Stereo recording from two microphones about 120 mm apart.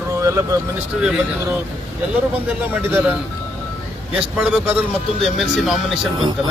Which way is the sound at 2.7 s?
15° right (ahead or behind).